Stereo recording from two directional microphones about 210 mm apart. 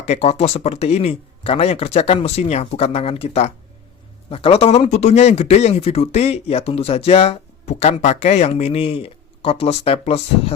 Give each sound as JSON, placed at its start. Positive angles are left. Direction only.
{"t": 0.0, "sound": "speech", "side_deg": 30}